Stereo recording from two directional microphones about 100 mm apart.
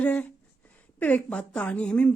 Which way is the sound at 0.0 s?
15° left (ahead or behind).